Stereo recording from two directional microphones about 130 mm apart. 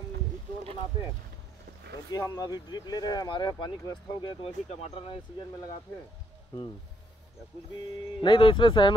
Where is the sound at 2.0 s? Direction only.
30° left (ahead or behind).